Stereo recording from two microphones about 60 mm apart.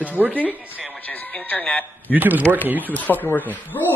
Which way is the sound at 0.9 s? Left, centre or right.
Left.